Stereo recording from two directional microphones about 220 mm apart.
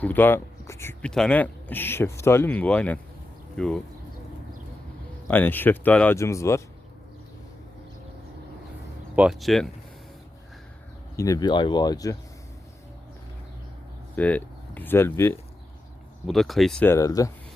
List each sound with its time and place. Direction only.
0.0 s speech: 10° left (ahead or behind)
5.3 s speech: 10° left (ahead or behind)
9.1 s speech: 5° right (ahead or behind)
11.2 s speech: 15° left (ahead or behind)
14.2 s speech: 5° left (ahead or behind)